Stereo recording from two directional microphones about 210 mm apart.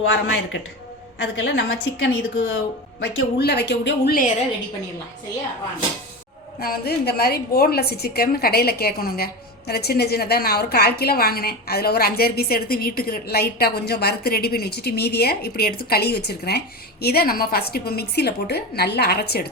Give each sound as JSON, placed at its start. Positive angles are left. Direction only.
{"t": 0.0, "sound": "a woman's voice", "side_deg": 60}
{"t": 6.6, "sound": "a woman's voice", "side_deg": 45}